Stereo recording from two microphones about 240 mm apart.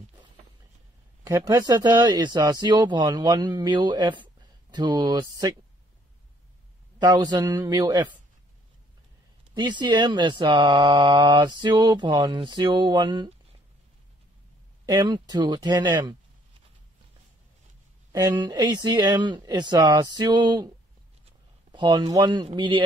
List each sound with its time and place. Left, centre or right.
1.2 s speech: centre
7.0 s speech: centre
9.5 s speech: centre
14.9 s speech: centre
18.1 s speech: centre
21.7 s speech: centre